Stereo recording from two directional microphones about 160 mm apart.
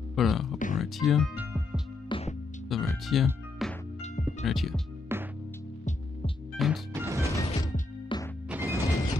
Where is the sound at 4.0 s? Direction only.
45° left (ahead or behind).